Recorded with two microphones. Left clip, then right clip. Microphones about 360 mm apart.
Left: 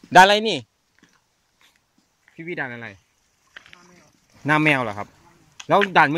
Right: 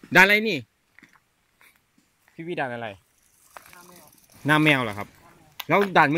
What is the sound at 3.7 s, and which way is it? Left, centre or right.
Snake, right.